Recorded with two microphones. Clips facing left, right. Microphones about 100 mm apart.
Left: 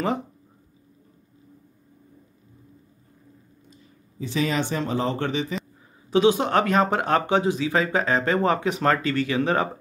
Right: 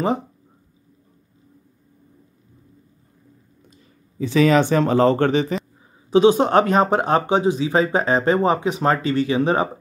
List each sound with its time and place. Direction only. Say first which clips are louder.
4.2 s speech: right 9 dB; 90° right; by 5.6 s 50° right (ahead or behind)
6.0 s speech: right 5 dB; 30° right (ahead or behind)